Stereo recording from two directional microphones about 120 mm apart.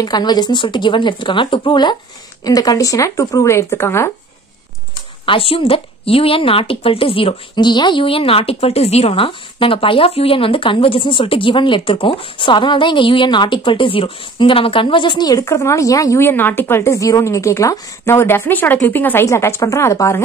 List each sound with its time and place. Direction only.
0.0 s speech: 35° left (ahead or behind)
5.2 s speech: 50° left (ahead or behind); by 20.2 s 25° left (ahead or behind)